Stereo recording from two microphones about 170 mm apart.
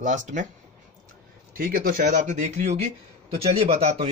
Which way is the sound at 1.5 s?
55° right (ahead or behind).